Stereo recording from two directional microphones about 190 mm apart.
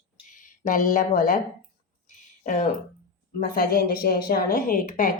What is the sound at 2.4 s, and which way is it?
A woman's voice, 45° left (ahead or behind).